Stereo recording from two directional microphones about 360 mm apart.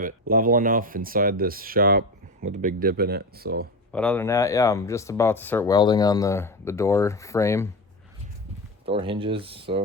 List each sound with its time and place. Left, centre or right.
0.0 s speech: right
3.9 s speech: centre
8.9 s speech: centre